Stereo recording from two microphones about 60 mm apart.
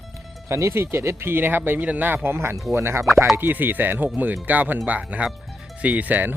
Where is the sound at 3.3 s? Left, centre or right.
Right.